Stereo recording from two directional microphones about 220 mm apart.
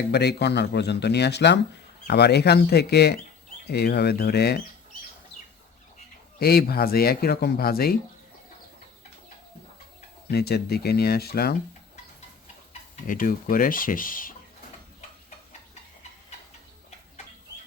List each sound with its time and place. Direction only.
0.1 s speech: 50° left (ahead or behind)
6.4 s speech: 45° left (ahead or behind)
10.3 s speech: 45° left (ahead or behind)
13.1 s speech: 40° left (ahead or behind)